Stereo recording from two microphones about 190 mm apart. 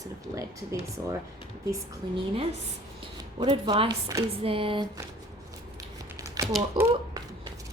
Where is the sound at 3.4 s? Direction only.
30° right (ahead or behind).